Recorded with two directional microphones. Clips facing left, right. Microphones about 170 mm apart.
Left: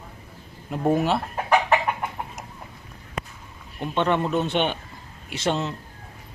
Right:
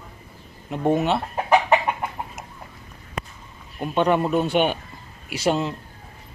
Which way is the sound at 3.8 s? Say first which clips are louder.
Right 3 dB; 10° right (ahead or behind).